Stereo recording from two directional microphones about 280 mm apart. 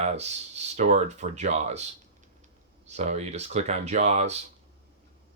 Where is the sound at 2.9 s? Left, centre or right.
Right.